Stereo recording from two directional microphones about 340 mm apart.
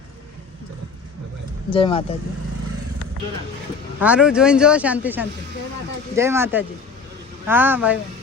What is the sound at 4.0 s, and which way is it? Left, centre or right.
Speech, centre.